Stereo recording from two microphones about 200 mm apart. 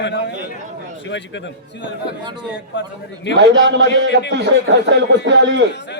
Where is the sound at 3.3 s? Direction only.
60° right (ahead or behind).